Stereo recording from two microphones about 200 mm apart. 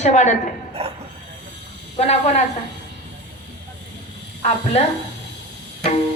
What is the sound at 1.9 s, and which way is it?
Speech, 35° left (ahead or behind).